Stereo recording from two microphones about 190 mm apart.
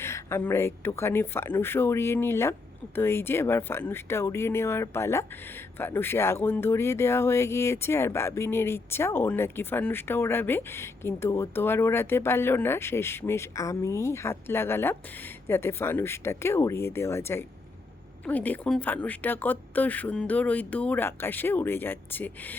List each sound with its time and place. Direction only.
0.0 s speech: 15° left (ahead or behind)